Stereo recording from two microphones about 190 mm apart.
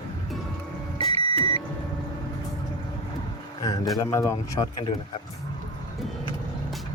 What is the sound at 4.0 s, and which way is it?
Speech, 15° left (ahead or behind).